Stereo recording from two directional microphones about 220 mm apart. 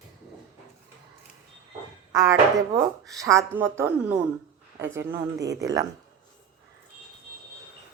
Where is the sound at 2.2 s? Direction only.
15° right (ahead or behind).